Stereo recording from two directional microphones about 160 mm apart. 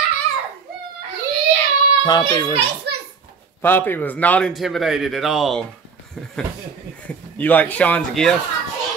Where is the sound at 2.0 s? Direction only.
25° left (ahead or behind).